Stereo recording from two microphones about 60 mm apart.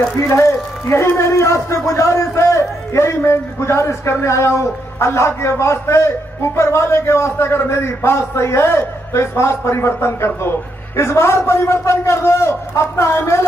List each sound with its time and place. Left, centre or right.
0.2 s a man's voice: left